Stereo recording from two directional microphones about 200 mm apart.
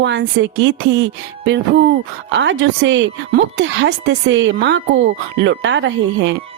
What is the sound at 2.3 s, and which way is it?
Speech, 65° right (ahead or behind).